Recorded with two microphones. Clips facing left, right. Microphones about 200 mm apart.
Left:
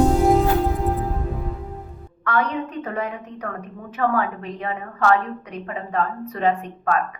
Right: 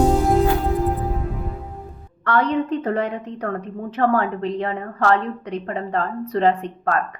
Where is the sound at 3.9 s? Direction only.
35° right (ahead or behind).